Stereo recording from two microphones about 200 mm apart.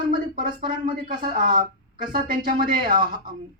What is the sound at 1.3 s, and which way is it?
Speech, 45° right (ahead or behind).